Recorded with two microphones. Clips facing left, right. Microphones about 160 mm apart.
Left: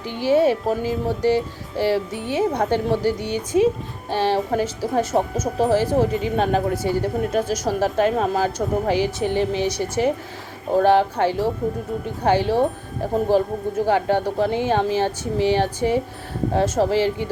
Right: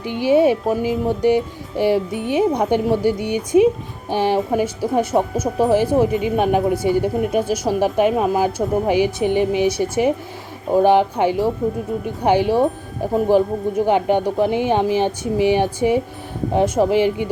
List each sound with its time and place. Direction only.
0.0 s speech: 15° right (ahead or behind)